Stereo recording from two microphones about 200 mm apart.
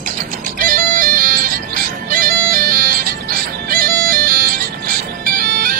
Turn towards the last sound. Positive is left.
turn(degrees=-45)  # may be behind; listen again after turning